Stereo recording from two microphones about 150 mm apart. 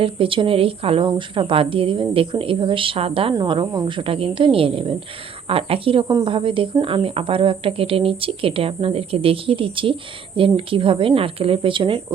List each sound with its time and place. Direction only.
0.0 s speech: 35° right (ahead or behind)